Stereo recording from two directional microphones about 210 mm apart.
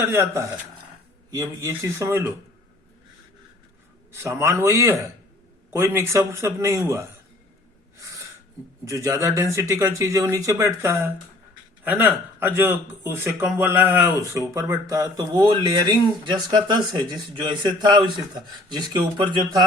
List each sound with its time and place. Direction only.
0.0 s a man's voice: 10° right (ahead or behind)
4.1 s a man's voice: 10° right (ahead or behind)
7.9 s gasp: 15° right (ahead or behind)
8.8 s a man's voice: 15° right (ahead or behind)